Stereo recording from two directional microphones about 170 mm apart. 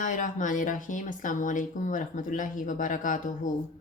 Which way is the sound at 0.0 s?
50° left (ahead or behind).